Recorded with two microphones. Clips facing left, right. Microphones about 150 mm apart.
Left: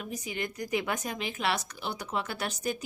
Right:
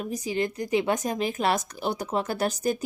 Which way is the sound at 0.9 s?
40° right (ahead or behind).